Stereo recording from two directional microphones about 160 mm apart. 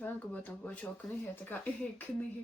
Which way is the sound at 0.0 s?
10° left (ahead or behind).